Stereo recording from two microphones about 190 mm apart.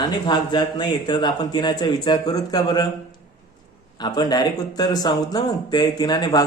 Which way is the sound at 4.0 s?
20° left (ahead or behind).